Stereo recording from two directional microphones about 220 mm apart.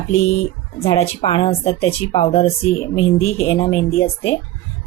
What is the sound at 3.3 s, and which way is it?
Speech, 10° left (ahead or behind).